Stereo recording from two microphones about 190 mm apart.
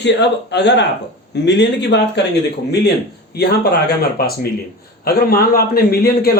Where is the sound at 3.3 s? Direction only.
55° left (ahead or behind).